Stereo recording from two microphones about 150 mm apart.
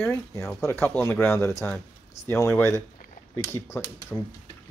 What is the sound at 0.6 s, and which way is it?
Speech, 15° left (ahead or behind).